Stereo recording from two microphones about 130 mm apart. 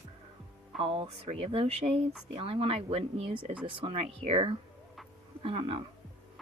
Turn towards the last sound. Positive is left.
turn(degrees=-45)  # may be behind; listen again after turning